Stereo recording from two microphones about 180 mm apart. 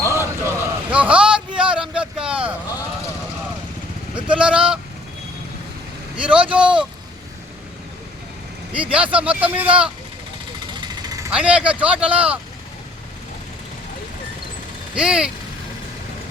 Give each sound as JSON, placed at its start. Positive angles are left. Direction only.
{"t": 0.0, "sound": "a sound", "side_deg": 15}
{"t": 0.4, "sound": "a sound", "side_deg": -10}
{"t": 1.5, "sound": "vehicle", "side_deg": -5}
{"t": 4.4, "sound": "speech", "side_deg": -5}
{"t": 6.1, "sound": "speech", "side_deg": -5}
{"t": 8.7, "sound": "speech", "side_deg": -5}
{"t": 11.3, "sound": "speech", "side_deg": -5}
{"t": 14.9, "sound": "speech", "side_deg": -5}